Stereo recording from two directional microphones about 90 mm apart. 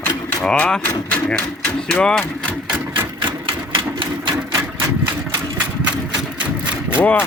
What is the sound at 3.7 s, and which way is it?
Sewing machine, 65° right (ahead or behind).